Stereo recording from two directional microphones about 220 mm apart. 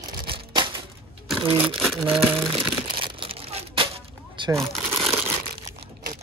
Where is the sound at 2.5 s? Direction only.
25° right (ahead or behind).